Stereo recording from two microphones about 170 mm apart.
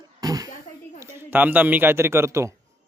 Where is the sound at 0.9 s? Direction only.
15° right (ahead or behind).